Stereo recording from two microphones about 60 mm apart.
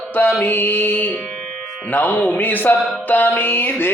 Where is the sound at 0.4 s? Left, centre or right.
Left.